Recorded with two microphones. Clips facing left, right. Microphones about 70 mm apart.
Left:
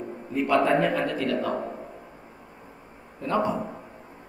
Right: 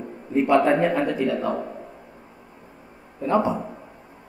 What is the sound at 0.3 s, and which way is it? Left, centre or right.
A man's voice, right.